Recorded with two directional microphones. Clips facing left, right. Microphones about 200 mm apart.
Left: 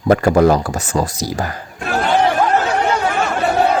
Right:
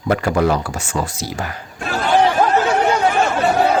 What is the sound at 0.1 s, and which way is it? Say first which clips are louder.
Speech: left 5 dB; 40° left (ahead or behind).